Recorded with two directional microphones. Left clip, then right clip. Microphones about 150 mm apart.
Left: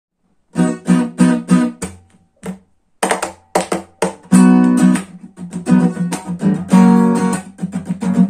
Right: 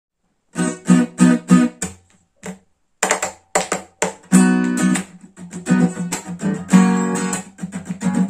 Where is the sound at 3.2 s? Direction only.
15° left (ahead or behind).